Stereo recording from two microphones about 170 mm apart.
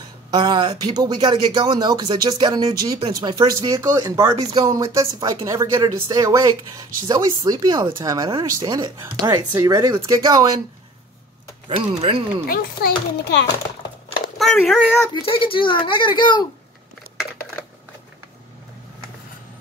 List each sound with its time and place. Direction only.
0.3 s speech: 25° right (ahead or behind)
11.7 s speech: 35° right (ahead or behind)
12.4 s a child's voice: 65° left (ahead or behind); by 13.5 s 85° left
14.4 s speech: centre (ahead or behind)
15.1 s a child's voice: 30° left (ahead or behind)